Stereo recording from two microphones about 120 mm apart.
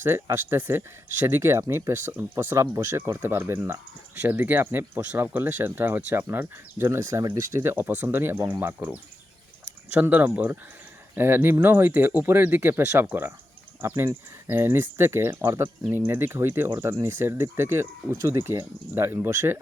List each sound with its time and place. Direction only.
0.0 s speech: 20° right (ahead or behind)